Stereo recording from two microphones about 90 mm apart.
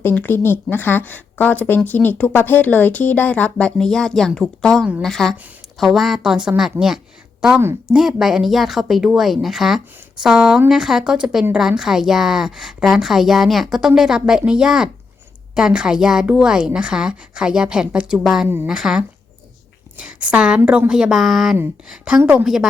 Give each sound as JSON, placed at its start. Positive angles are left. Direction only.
{"t": 0.0, "sound": "a woman's voice", "side_deg": 20}
{"t": 18.4, "sound": "speech", "side_deg": -25}
{"t": 18.7, "sound": "a woman's voice", "side_deg": -5}
{"t": 22.2, "sound": "speech", "side_deg": -25}